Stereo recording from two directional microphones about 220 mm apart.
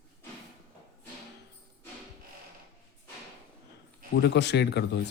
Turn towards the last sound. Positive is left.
turn(degrees=50)  # may be behind; listen again after turning